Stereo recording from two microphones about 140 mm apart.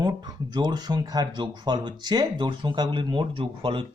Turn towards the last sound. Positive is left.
turn(degrees=-40)  # may be behind; listen again after turning